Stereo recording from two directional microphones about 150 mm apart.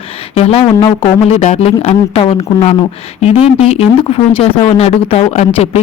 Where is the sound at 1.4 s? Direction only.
50° left (ahead or behind).